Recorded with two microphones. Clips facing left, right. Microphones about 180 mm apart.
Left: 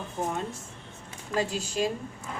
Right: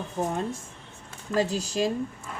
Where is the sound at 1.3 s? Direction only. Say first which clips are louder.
Right 3 dB; 40° right (ahead or behind).